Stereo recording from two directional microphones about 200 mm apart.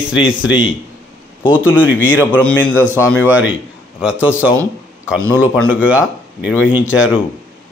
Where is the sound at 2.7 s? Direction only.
10° right (ahead or behind).